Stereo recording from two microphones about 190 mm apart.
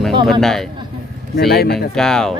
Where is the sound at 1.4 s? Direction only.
55° left (ahead or behind).